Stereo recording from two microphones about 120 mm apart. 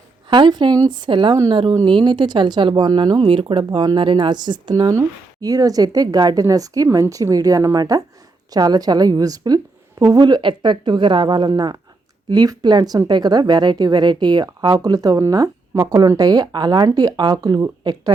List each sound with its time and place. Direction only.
0.3 s speech: 40° right (ahead or behind)